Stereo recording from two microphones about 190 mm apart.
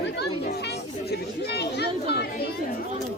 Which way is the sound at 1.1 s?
60° left (ahead or behind).